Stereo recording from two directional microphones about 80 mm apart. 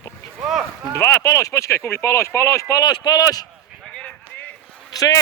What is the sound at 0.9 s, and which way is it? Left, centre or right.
Speech, left.